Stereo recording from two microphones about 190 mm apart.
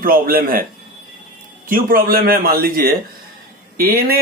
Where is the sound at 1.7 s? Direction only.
50° right (ahead or behind).